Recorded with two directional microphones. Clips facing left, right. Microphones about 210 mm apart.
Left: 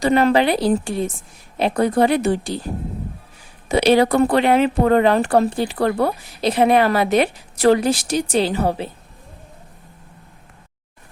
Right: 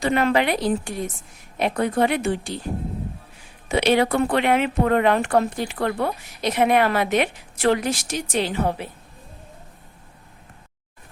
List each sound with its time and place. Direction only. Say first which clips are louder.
0.0 s speech: left 4 dB; 35° left (ahead or behind)
3.7 s speech: left 4 dB; 35° left (ahead or behind)